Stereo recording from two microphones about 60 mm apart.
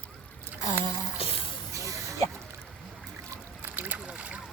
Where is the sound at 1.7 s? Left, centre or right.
Right.